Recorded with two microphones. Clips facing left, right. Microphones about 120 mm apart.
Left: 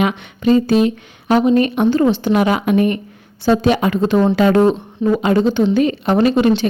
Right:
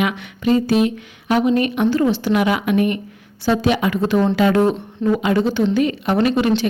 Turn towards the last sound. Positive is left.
turn(degrees=30)  # may be behind; listen again after turning